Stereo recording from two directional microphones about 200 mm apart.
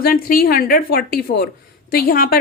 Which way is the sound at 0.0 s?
45° left (ahead or behind).